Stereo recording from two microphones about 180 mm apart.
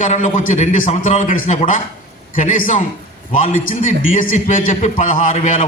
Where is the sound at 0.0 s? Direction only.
40° left (ahead or behind).